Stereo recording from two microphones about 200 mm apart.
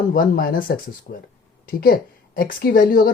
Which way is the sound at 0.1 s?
45° left (ahead or behind).